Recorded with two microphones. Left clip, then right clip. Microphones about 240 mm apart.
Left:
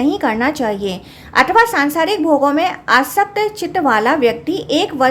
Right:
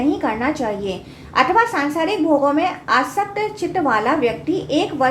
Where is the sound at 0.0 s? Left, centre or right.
Left.